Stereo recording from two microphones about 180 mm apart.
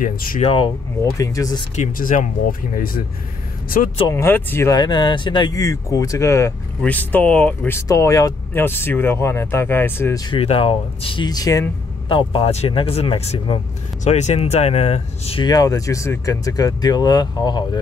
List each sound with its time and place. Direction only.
0.0 s speech: 50° left (ahead or behind)
0.4 s speech: 30° left (ahead or behind)
1.1 s speech: 20° left (ahead or behind)
1.8 s speech: 50° left (ahead or behind)
4.1 s speech: 15° left (ahead or behind)
10.3 s speech: 30° left (ahead or behind)
14.0 s speech: 40° left (ahead or behind); by 17.6 s 20° left (ahead or behind)